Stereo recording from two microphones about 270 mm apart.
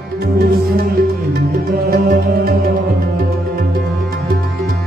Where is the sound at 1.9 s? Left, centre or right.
Right.